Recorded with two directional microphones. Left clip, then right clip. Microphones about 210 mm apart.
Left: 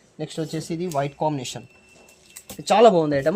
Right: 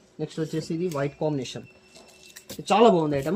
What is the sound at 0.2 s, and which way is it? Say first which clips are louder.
Speech: left 1 dB; 40° left (ahead or behind).